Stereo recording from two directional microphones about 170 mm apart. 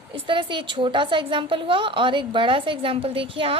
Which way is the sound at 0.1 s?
30° right (ahead or behind).